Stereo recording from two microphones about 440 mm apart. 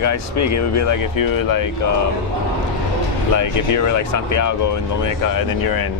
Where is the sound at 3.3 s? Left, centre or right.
Left.